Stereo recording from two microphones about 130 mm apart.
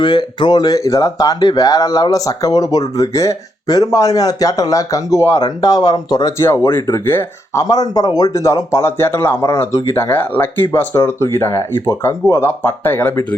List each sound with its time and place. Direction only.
0.0 s speech: 35° left (ahead or behind); by 7.6 s 15° left (ahead or behind)
7.6 s speech: 30° left (ahead or behind)